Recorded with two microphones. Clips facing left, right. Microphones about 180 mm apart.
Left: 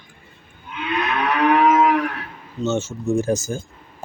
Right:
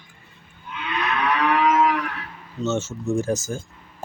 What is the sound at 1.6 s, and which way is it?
Moo, 50° left (ahead or behind).